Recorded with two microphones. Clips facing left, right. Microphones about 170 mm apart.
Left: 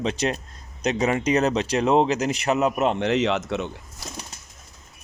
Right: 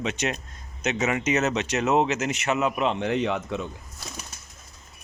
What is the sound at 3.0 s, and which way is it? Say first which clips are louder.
Speech: left 3 dB; 90° left.